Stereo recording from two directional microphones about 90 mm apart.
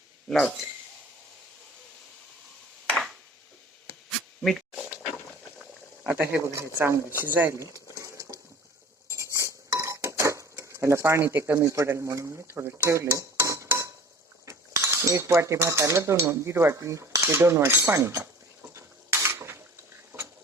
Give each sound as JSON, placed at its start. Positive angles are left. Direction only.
{"t": 0.3, "sound": "speech", "side_deg": 5}
{"t": 4.4, "sound": "a sound", "side_deg": 0}
{"t": 6.1, "sound": "speech", "side_deg": -30}
{"t": 9.0, "sound": "cutlery", "side_deg": -35}
{"t": 13.7, "sound": "a sound", "side_deg": -30}
{"t": 14.4, "sound": "cutlery", "side_deg": -35}
{"t": 18.7, "sound": "dishes", "side_deg": -30}